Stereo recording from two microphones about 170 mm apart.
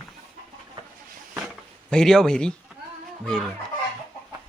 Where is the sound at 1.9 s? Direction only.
5° left (ahead or behind).